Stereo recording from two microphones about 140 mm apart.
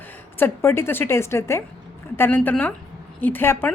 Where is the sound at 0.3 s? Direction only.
15° left (ahead or behind).